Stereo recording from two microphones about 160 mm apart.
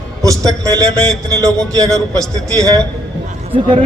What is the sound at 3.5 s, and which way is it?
Speech, 35° right (ahead or behind).